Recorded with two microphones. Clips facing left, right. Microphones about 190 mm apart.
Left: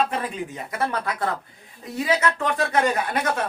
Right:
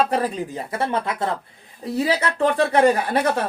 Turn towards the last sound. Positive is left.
turn(degrees=-30)  # may be behind; listen again after turning